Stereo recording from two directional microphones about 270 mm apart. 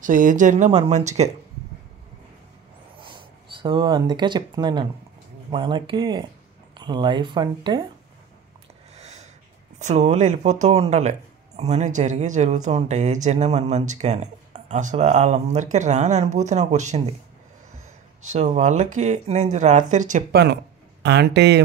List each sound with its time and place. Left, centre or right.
0.0 s speech: right
3.6 s speech: centre
8.9 s a sound: right
9.8 s speech: right
18.2 s speech: right